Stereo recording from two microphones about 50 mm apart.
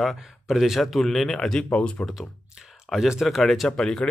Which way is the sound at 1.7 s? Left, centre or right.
Left.